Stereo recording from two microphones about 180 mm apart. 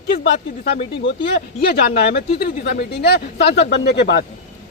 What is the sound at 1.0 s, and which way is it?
Speech, 90° left.